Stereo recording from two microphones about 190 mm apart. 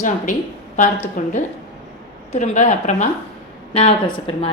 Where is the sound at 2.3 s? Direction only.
40° left (ahead or behind).